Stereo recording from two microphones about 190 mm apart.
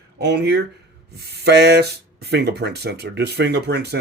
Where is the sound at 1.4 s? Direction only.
60° right (ahead or behind).